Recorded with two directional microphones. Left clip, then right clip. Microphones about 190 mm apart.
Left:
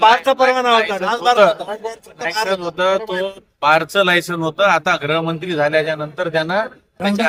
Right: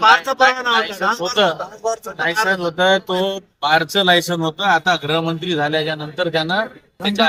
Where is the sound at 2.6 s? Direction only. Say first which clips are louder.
Right 1 dB; 35° left (ahead or behind).